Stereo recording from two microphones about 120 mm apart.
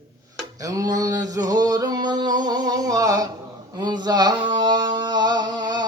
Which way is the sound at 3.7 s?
35° right (ahead or behind).